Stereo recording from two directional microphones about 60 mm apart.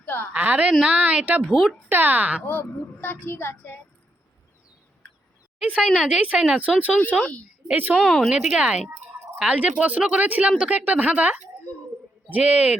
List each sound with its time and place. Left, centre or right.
0.0 s a sound: left
0.3 s speech: right
1.5 s speech: centre
1.9 s speech: right
2.5 s speech: left
5.5 s a woman's voice: centre
7.2 s a woman's voice: left
7.7 s speech: right
8.0 s speech: centre
8.3 s speech: centre